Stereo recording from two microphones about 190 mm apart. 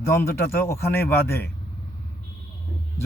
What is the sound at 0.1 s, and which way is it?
Speech, 15° left (ahead or behind).